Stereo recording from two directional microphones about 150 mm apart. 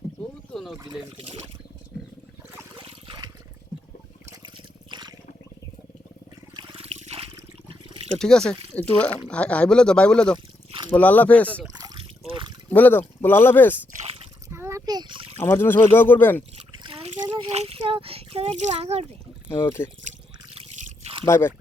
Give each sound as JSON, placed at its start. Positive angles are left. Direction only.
{"t": 0.2, "sound": "a sound", "side_deg": 0}
{"t": 2.7, "sound": "water", "side_deg": -35}
{"t": 4.3, "sound": "trickle", "side_deg": -30}
{"t": 6.6, "sound": "trickle", "side_deg": -35}
{"t": 8.2, "sound": "speech", "side_deg": 5}
{"t": 11.8, "sound": "trickle", "side_deg": -30}
{"t": 12.7, "sound": "speech", "side_deg": 10}
{"t": 14.5, "sound": "splash", "side_deg": -20}
{"t": 15.4, "sound": "speech", "side_deg": 15}
{"t": 16.7, "sound": "splash", "side_deg": -35}
{"t": 17.5, "sound": "a sound", "side_deg": -45}
{"t": 19.6, "sound": "speech", "side_deg": 15}
{"t": 20.8, "sound": "a sound", "side_deg": -45}
{"t": 21.2, "sound": "speech", "side_deg": 15}